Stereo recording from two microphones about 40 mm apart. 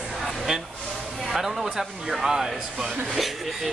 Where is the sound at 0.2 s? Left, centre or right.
Centre.